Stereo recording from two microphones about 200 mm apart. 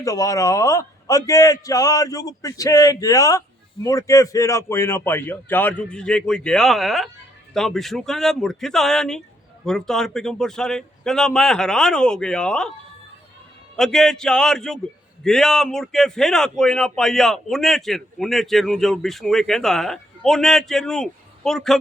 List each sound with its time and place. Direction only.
0.0 s a man's voice: 15° left (ahead or behind)
13.7 s speech: 5° left (ahead or behind)